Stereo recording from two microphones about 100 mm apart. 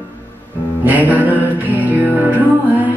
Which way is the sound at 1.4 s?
15° right (ahead or behind).